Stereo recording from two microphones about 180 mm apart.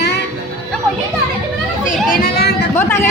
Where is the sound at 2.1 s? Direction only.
55° left (ahead or behind).